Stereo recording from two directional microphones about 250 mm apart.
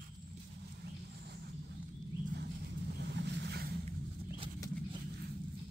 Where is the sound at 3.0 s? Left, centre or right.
Right.